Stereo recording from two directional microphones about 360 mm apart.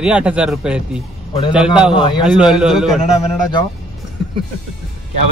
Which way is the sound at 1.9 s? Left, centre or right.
Centre.